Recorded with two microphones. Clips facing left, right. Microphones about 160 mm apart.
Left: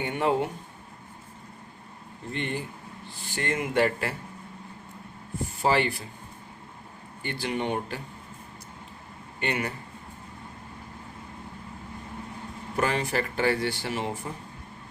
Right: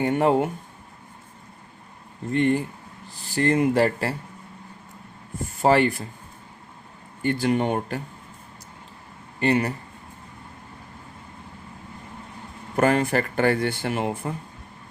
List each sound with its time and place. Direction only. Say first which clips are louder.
0.0 s speech: right 6 dB; 45° right (ahead or behind)
2.3 s speech: right 11 dB; 45° right (ahead or behind)
5.6 s speech: right 6 dB; 45° right (ahead or behind)
7.2 s speech: right 8 dB; 45° right (ahead or behind)
9.4 s speech: right 8 dB; 35° right (ahead or behind)
12.7 s speech: right 6 dB; 50° right (ahead or behind)